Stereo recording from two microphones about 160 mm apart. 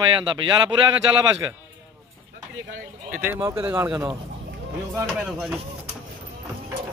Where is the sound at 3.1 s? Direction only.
15° right (ahead or behind).